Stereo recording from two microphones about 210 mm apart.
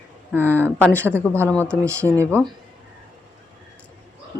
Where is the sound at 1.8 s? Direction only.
15° right (ahead or behind).